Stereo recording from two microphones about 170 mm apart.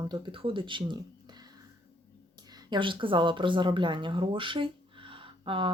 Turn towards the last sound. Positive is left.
turn(degrees=-30)  # may be behind; listen again after turning